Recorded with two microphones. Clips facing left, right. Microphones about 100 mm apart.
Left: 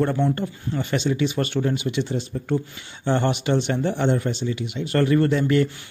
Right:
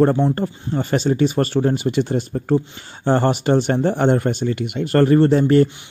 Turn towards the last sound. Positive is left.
turn(degrees=-40)  # may be behind; listen again after turning